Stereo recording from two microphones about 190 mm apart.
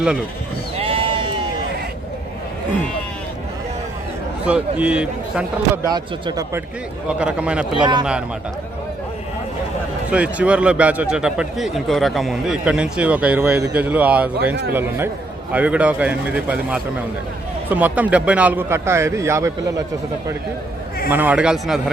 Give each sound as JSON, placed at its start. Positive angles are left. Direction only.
{"t": 0.8, "sound": "sheep", "side_deg": -30}
{"t": 4.4, "sound": "speech", "side_deg": -5}
{"t": 5.9, "sound": "speech", "side_deg": -20}
{"t": 7.1, "sound": "speech", "side_deg": -5}
{"t": 7.8, "sound": "speech", "side_deg": -25}
{"t": 10.1, "sound": "speech", "side_deg": -5}
{"t": 21.1, "sound": "speech", "side_deg": -10}